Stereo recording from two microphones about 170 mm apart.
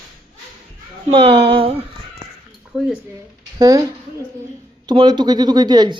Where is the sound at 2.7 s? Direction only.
5° right (ahead or behind).